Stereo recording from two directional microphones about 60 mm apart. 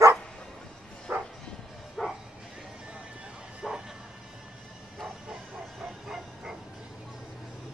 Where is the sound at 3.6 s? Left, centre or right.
Centre.